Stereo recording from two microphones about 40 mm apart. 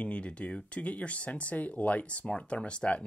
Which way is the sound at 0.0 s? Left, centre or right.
Left.